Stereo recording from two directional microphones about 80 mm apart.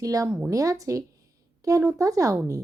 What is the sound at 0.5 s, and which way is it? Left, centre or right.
A woman's voice, right.